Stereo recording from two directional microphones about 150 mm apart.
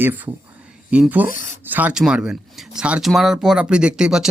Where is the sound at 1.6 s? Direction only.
10° right (ahead or behind).